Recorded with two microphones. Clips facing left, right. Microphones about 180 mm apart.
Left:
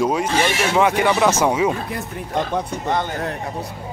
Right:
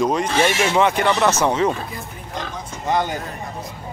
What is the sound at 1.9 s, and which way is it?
Speech, 60° left (ahead or behind).